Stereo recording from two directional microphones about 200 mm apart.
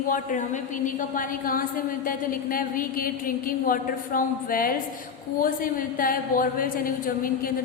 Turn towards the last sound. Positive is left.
turn(degrees=45)  # may be behind; listen again after turning